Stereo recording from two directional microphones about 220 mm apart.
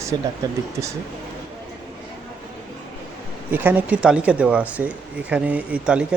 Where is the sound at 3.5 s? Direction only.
10° right (ahead or behind).